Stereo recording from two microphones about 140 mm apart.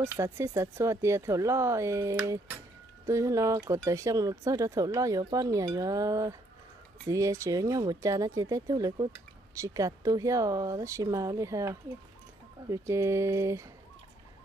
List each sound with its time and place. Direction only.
0.0 s speech: 20° right (ahead or behind)